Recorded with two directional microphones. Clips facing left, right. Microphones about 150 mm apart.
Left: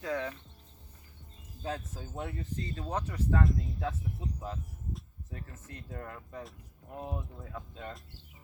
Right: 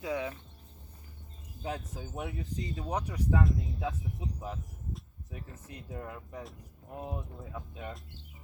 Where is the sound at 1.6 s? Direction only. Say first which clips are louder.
Even; 15° right (ahead or behind).